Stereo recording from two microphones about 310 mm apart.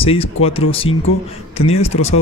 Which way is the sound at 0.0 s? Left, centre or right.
Centre.